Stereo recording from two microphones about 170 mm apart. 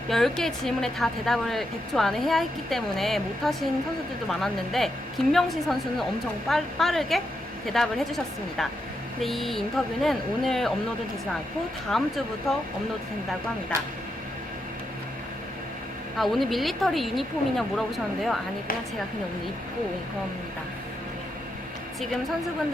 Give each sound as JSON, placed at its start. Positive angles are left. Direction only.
{"t": 0.1, "sound": "a woman's voice", "side_deg": 0}
{"t": 11.9, "sound": "a woman's voice", "side_deg": 0}
{"t": 13.7, "sound": "speech", "side_deg": -15}
{"t": 16.1, "sound": "a woman's voice", "side_deg": 0}